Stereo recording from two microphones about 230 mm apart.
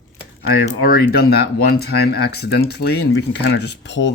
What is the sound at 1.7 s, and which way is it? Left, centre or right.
Speech, left.